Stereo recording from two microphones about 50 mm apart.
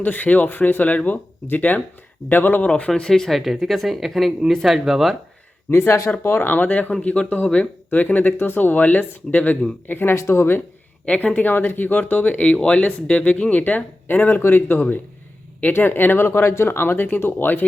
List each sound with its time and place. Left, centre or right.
0.0 s speech: left
2.6 s speech: left
2.9 s speech: centre
5.7 s speech: left
6.2 s speech: left
7.0 s speech: left
7.9 s speech: left
10.2 s speech: left
11.0 s speech: left
11.4 s speech: left
12.6 s speech: left
15.7 s speech: left